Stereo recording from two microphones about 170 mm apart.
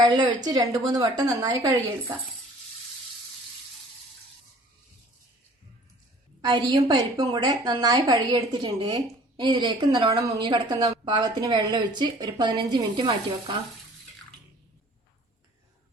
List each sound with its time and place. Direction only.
0.0 s a woman's voice: 25° right (ahead or behind)
6.4 s a woman's voice: 25° right (ahead or behind)